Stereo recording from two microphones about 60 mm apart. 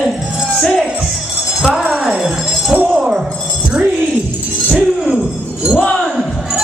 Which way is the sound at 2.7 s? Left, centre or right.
Right.